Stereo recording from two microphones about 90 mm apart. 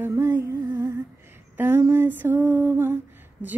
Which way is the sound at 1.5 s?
25° right (ahead or behind).